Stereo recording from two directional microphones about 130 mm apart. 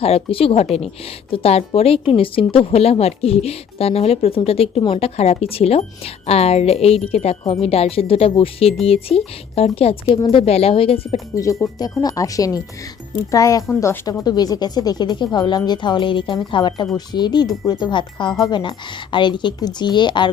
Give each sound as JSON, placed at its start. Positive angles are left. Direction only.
{"t": 0.0, "sound": "a woman's voice", "side_deg": 50}
{"t": 11.6, "sound": "a woman's voice", "side_deg": 20}